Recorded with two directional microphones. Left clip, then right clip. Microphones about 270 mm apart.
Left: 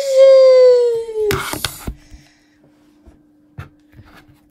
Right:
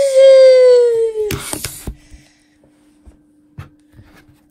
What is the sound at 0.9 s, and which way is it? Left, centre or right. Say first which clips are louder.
Wail: right 2 dB; centre.